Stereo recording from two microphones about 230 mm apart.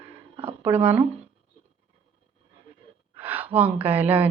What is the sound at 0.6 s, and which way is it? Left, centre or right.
Speech, centre.